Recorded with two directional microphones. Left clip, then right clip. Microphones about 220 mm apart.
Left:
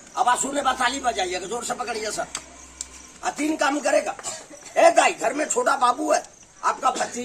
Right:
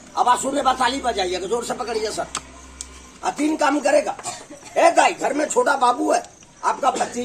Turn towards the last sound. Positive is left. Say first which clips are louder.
# right 3 dB
turn(degrees=-15)  # may be behind; listen again after turning